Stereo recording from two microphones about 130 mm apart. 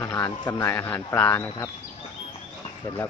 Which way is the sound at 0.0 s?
20° left (ahead or behind).